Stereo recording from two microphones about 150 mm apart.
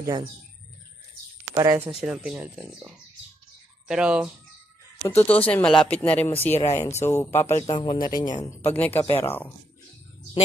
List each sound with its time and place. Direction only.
0.0 s speech: 20° right (ahead or behind)
1.5 s speech: 20° right (ahead or behind)
2.0 s speech: 5° right (ahead or behind)
5.0 s speech: 15° left (ahead or behind)
7.6 s speech: 35° left (ahead or behind)
8.7 s speech: 10° left (ahead or behind)